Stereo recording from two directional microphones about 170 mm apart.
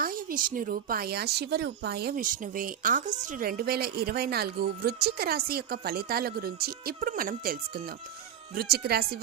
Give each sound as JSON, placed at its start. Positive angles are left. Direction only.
{"t": 0.0, "sound": "speech", "side_deg": -55}
{"t": 8.5, "sound": "speech", "side_deg": -65}